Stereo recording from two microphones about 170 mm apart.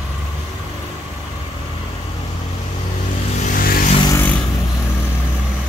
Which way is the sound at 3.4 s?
55° left (ahead or behind).